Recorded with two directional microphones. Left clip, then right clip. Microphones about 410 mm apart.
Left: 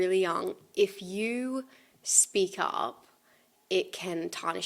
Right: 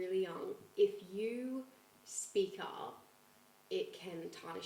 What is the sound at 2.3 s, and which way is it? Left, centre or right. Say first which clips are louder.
A woman's voice: left 9 dB; left.